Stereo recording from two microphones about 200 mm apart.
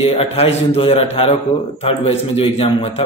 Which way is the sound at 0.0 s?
30° left (ahead or behind).